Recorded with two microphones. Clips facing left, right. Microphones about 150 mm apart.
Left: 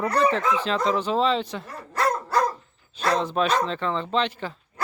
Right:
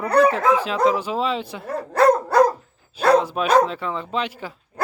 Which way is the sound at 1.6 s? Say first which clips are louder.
Right 9 dB; 55° right (ahead or behind).